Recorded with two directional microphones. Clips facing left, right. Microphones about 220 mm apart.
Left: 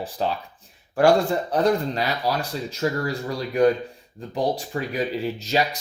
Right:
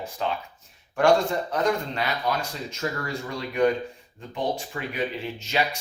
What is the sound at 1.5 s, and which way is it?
Speech, 35° left (ahead or behind).